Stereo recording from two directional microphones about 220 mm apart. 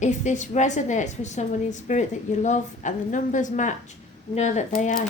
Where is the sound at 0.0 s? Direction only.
35° left (ahead or behind).